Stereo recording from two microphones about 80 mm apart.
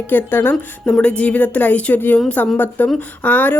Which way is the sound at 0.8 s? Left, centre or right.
Centre.